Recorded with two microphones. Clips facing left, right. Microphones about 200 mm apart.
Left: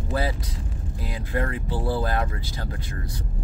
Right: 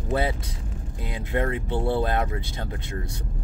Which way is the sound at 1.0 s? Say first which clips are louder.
Right 2 dB; 25° right (ahead or behind).